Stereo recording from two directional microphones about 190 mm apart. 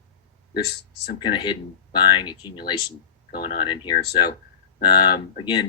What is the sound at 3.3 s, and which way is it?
Speech, 55° left (ahead or behind).